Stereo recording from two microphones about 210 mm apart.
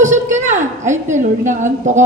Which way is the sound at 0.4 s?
35° right (ahead or behind).